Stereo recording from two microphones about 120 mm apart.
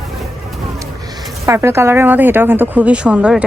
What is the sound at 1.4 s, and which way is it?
A woman's voice, 20° right (ahead or behind).